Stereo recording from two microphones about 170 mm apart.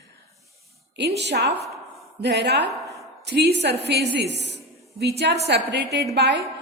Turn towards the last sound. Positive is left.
turn(degrees=-90)